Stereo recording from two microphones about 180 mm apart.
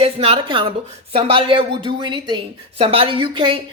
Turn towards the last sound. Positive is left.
turn(degrees=-30)  # may be behind; listen again after turning